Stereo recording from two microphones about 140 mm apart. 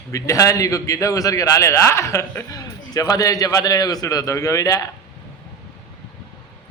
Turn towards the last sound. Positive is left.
turn(degrees=25)  # may be behind; listen again after turning